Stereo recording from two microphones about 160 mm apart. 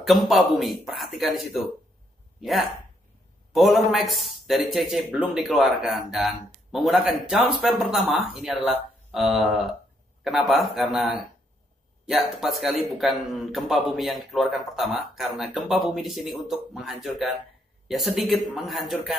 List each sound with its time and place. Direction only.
0.0 s a man's voice: centre (ahead or behind)